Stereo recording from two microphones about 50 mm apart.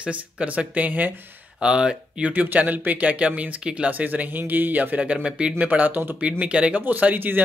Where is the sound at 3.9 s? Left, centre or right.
Right.